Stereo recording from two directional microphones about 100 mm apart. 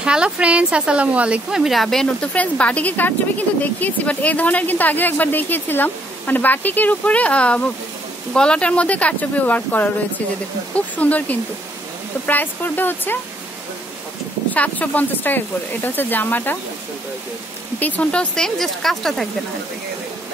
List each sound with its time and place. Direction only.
0.0 s a woman's voice: 10° right (ahead or behind)
2.3 s a woman's voice: 15° left (ahead or behind)
14.5 s speech: 15° left (ahead or behind)
17.7 s a woman's voice: 15° left (ahead or behind)